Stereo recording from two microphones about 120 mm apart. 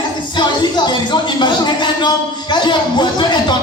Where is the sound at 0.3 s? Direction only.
40° left (ahead or behind).